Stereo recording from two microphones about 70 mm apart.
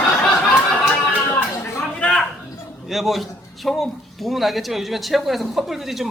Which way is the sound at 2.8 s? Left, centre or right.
Centre.